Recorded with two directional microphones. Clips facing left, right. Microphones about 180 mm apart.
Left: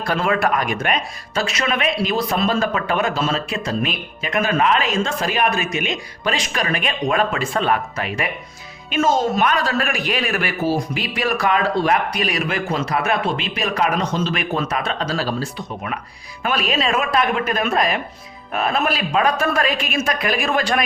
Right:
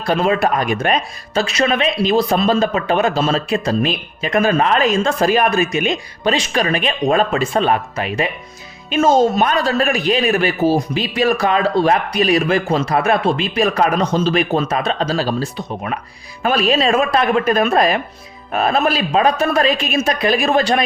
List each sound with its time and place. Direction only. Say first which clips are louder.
0.1 s speech: right 4 dB; 20° right (ahead or behind)